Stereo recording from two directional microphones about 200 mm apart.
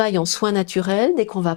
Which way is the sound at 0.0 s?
10° left (ahead or behind).